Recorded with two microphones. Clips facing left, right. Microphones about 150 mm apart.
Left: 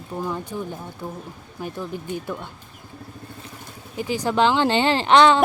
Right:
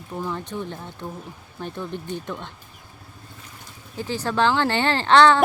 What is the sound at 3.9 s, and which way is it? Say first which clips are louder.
Speech: left 3 dB; 15° left (ahead or behind).